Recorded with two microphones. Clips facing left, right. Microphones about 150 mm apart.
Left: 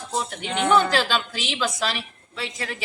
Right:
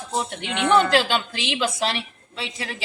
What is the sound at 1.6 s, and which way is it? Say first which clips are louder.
Speech: right 2 dB; 25° right (ahead or behind).